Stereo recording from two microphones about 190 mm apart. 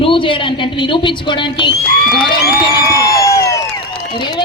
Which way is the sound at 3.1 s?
15° left (ahead or behind).